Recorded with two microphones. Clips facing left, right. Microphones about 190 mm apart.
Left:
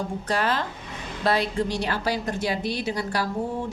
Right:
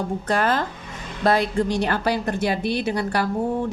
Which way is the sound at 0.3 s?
50° right (ahead or behind).